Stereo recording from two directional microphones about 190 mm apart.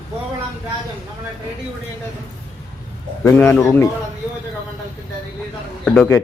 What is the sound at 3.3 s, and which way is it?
Speech, 10° left (ahead or behind).